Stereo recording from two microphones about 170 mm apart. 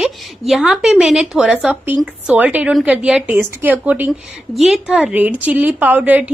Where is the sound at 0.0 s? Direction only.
Centre (ahead or behind).